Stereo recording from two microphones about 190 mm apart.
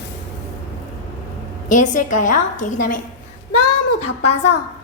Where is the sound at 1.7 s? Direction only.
40° left (ahead or behind).